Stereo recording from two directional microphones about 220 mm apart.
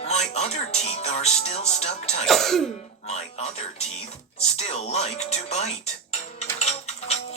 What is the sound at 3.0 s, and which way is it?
Speech, 30° left (ahead or behind).